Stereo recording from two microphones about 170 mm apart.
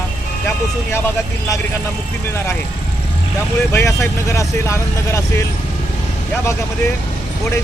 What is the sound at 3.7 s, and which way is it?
Speech, 15° left (ahead or behind).